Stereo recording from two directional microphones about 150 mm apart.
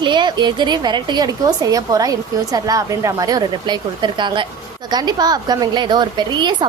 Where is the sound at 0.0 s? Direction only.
30° right (ahead or behind).